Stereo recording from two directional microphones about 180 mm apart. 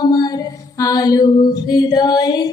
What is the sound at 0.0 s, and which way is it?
Music, 20° left (ahead or behind).